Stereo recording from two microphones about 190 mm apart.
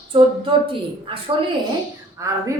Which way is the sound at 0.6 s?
30° right (ahead or behind).